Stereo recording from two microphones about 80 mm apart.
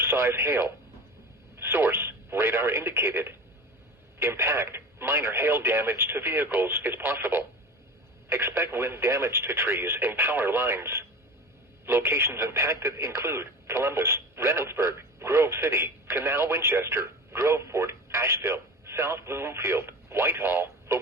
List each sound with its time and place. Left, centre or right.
0.0 s speech: right